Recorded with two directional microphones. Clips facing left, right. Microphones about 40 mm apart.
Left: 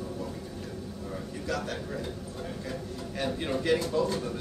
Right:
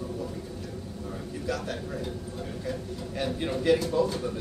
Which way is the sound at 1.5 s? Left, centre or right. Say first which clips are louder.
Right 1 dB; centre.